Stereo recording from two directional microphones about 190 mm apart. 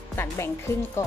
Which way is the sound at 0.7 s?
15° left (ahead or behind).